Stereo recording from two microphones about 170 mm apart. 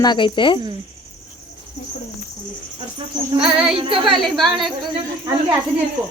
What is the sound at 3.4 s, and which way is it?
Speech, 5° right (ahead or behind).